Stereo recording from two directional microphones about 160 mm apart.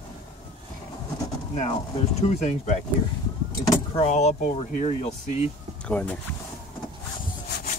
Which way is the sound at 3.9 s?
40° left (ahead or behind).